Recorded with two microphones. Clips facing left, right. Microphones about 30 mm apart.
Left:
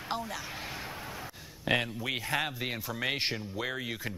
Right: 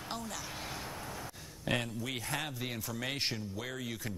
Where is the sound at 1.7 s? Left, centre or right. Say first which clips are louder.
Left 5 dB; left.